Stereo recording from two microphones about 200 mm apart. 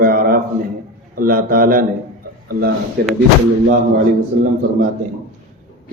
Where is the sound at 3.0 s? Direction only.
55° right (ahead or behind).